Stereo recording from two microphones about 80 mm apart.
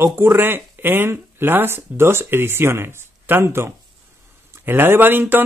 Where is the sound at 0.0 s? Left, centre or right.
Right.